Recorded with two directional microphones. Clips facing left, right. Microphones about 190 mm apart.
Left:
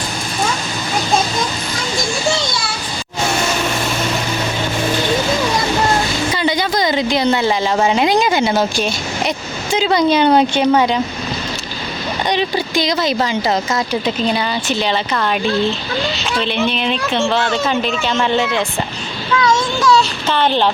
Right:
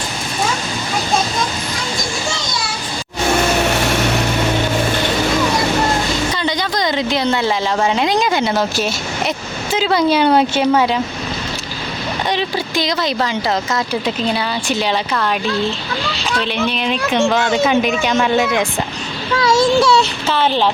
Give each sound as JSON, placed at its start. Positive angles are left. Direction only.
{"t": 6.3, "sound": "a woman's voice", "side_deg": 10}
{"t": 12.3, "sound": "a woman's voice", "side_deg": 0}
{"t": 16.4, "sound": "speech", "side_deg": -5}
{"t": 19.4, "sound": "a child's voice", "side_deg": -30}
{"t": 20.2, "sound": "a woman's voice", "side_deg": -5}